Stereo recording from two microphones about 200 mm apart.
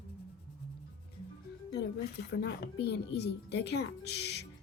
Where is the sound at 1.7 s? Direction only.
55° left (ahead or behind).